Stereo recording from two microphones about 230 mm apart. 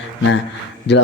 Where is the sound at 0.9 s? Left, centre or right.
Left.